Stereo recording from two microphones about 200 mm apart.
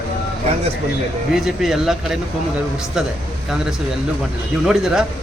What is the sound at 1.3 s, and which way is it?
Speech, centre (ahead or behind).